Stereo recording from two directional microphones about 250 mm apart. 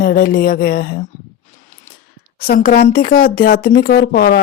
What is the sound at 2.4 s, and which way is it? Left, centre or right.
Speech, left.